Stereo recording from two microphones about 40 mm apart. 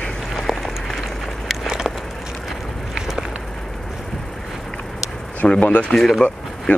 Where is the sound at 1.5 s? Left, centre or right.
Centre.